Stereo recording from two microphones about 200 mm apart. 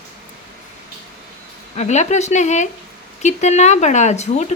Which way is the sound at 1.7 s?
35° left (ahead or behind).